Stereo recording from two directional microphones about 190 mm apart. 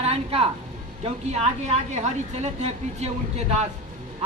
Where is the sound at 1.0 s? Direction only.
35° right (ahead or behind).